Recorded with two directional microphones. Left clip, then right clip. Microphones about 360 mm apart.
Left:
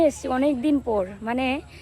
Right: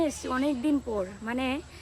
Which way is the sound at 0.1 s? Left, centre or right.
Centre.